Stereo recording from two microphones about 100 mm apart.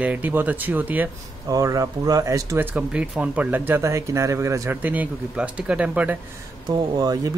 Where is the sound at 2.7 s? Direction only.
10° right (ahead or behind); by 4.7 s 30° right (ahead or behind).